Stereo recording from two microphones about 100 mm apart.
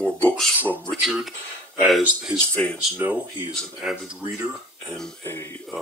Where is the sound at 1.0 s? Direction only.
Centre (ahead or behind).